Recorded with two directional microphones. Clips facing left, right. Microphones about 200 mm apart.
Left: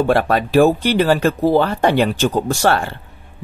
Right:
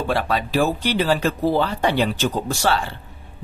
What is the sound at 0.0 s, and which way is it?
Speech, 55° left (ahead or behind).